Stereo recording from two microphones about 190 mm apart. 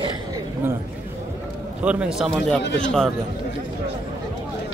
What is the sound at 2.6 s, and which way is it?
Speech, 70° left (ahead or behind).